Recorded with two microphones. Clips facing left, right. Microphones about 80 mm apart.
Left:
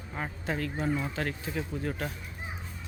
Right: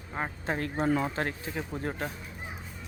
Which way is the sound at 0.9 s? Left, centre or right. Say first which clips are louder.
Right 5 dB; right.